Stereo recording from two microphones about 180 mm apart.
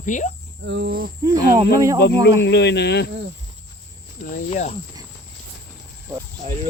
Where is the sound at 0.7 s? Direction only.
70° right (ahead or behind).